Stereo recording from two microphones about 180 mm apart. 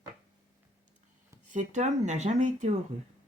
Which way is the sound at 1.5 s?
40° right (ahead or behind).